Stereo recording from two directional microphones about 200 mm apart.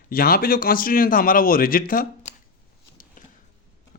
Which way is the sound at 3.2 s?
40° left (ahead or behind).